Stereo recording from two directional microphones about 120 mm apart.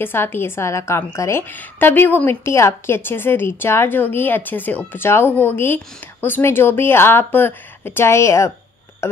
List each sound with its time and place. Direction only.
0.0 s a woman's voice: 20° left (ahead or behind)